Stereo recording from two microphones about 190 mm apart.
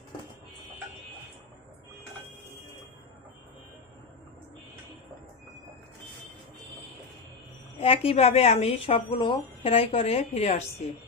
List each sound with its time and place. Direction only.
7.8 s speech: 30° left (ahead or behind)